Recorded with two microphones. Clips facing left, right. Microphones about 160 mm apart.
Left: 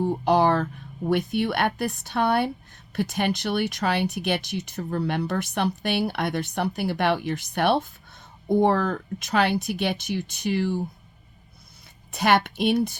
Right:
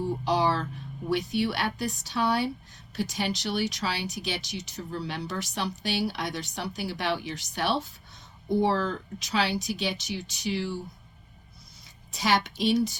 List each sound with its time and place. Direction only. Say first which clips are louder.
0.0 s speech: left 5 dB; 55° left (ahead or behind)
12.1 s speech: left 5 dB; 60° left (ahead or behind)